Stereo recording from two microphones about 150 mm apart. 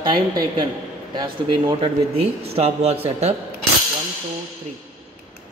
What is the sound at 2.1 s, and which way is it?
Speech, 45° right (ahead or behind).